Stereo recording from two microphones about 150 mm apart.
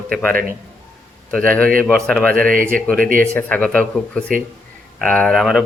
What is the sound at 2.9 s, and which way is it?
Speech, 65° right (ahead or behind).